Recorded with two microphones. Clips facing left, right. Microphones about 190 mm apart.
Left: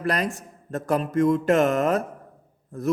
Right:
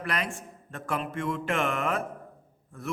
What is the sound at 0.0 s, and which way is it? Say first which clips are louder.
Speech: left 7 dB; 40° left (ahead or behind).